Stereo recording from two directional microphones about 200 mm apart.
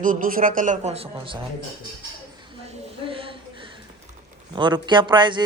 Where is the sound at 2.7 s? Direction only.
25° right (ahead or behind).